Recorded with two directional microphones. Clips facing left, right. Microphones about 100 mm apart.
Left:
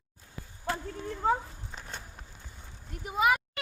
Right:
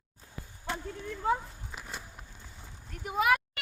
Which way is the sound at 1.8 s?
5° right (ahead or behind).